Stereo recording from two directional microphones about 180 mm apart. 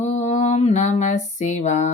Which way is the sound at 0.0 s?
40° left (ahead or behind).